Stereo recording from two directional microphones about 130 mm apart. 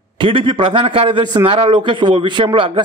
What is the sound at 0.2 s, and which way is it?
Speech, 40° right (ahead or behind).